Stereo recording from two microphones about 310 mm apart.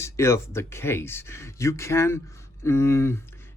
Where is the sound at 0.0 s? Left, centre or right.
Centre.